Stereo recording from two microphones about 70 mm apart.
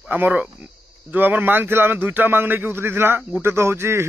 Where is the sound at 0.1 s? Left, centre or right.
Centre.